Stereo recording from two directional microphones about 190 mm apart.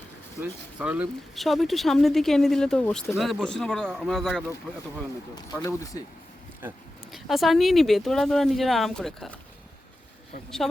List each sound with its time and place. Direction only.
0.8 s speech: 5° right (ahead or behind)
5.3 s speech: 15° left (ahead or behind)
7.1 s speech: centre (ahead or behind)
10.6 s speech: centre (ahead or behind)